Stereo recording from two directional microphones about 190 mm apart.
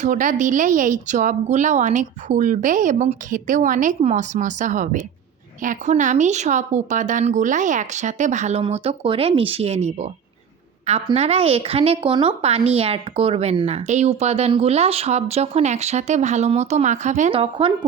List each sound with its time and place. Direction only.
0.0 s speech: 40° right (ahead or behind)